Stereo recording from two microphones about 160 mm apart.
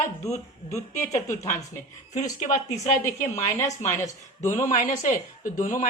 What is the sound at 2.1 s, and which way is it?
Speech, 50° left (ahead or behind).